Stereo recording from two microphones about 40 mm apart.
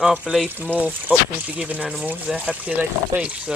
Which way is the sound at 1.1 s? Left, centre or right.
Right.